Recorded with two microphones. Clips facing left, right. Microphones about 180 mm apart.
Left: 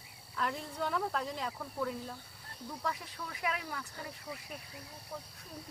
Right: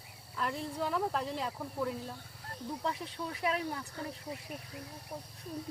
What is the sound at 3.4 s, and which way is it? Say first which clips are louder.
Speech: right 4 dB; 30° right (ahead or behind).